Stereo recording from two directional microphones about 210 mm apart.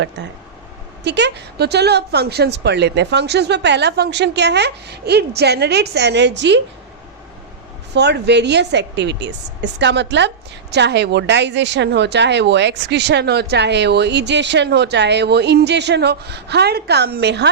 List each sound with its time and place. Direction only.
1.0 s a woman's voice: 55° right (ahead or behind)
7.9 s a woman's voice: 55° right (ahead or behind)